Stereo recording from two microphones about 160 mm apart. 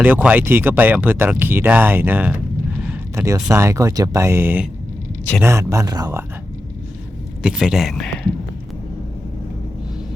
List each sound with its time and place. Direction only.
0.0 s speech: 10° right (ahead or behind)
2.9 s a sound: 15° right (ahead or behind)
3.5 s speech: 20° right (ahead or behind)
7.4 s speech: 5° right (ahead or behind)